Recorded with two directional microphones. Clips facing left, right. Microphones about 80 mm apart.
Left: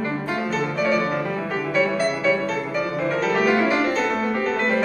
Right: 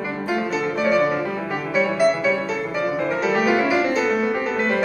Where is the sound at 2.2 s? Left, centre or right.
Centre.